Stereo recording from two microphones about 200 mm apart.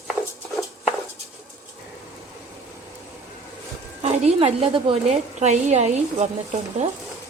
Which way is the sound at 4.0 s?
30° right (ahead or behind).